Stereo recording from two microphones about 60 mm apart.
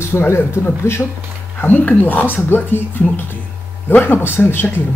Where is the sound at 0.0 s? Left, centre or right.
Left.